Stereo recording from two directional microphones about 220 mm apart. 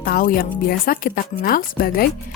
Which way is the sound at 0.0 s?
40° left (ahead or behind).